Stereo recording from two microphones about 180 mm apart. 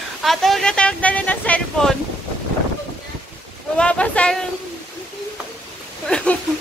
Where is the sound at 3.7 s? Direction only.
5° left (ahead or behind).